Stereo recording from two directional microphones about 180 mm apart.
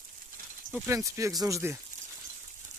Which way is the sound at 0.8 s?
15° right (ahead or behind).